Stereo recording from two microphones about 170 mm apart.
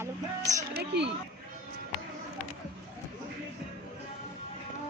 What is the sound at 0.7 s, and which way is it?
Speech, 75° right (ahead or behind).